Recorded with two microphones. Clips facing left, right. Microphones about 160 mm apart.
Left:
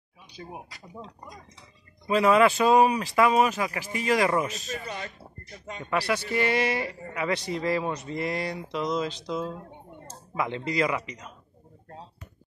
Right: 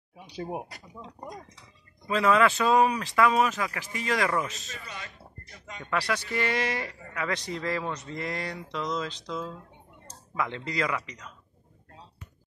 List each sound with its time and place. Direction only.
0.3 s speech: 60° right (ahead or behind)
2.0 s speech: 15° left (ahead or behind)
4.6 s speech: 40° left (ahead or behind)
5.9 s speech: 5° left (ahead or behind)
9.4 s a sound: 35° left (ahead or behind)
10.3 s speech: 15° left (ahead or behind)